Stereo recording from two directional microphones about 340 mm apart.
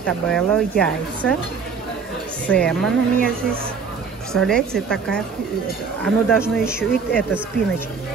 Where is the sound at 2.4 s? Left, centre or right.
Centre.